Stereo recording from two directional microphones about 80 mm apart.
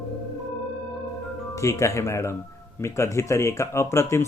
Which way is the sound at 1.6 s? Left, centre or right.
Left.